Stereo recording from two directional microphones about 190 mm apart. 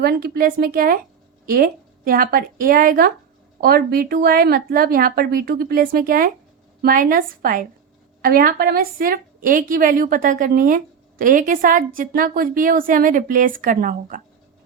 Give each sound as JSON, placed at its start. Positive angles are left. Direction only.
{"t": 0.0, "sound": "a woman's voice", "side_deg": -55}